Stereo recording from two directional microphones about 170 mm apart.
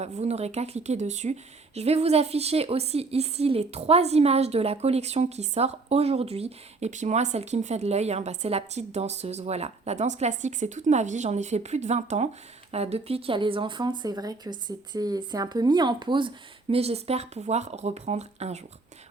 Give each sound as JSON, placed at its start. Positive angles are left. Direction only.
{"t": 0.0, "sound": "speech", "side_deg": -40}